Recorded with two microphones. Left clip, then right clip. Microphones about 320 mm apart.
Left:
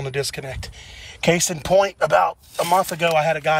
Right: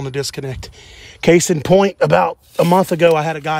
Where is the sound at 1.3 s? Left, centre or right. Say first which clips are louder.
Right 9 dB; right.